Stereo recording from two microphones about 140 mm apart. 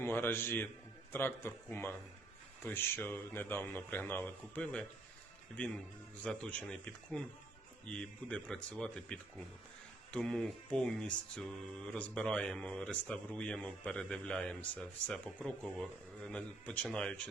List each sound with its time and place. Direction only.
0.0 s mantra: 15° left (ahead or behind)
5.5 s speech: 5° left (ahead or behind)
6.2 s mantra: 10° left (ahead or behind)
15.4 s speech: 5° left (ahead or behind)